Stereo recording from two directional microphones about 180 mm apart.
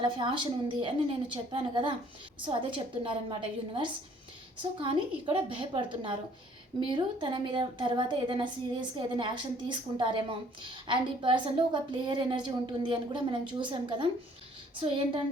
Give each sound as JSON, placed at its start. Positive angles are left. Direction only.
{"t": 0.0, "sound": "a woman's voice", "side_deg": -25}
{"t": 4.8, "sound": "a woman's voice", "side_deg": -30}